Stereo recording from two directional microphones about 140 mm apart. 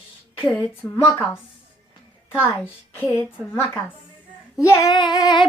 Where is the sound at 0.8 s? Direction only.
5° left (ahead or behind).